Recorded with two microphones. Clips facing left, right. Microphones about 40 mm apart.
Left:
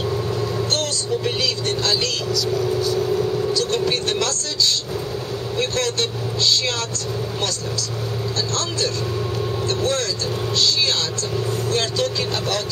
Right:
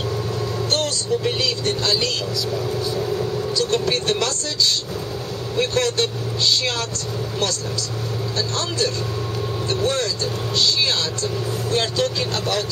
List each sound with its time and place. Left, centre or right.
0.7 s vehicle: centre
2.8 s vehicle: centre
3.1 s vehicle: centre
5.6 s vehicle: centre
8.5 s speech: centre
9.7 s vehicle: centre
11.7 s speech: centre